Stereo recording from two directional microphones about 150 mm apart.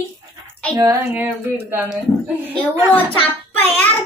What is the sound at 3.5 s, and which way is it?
Speech, 10° left (ahead or behind).